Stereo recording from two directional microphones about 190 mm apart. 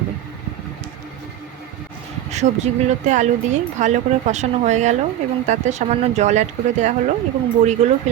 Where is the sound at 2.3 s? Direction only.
35° right (ahead or behind).